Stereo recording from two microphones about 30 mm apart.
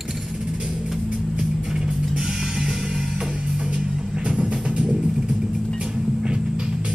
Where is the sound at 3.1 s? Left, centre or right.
Right.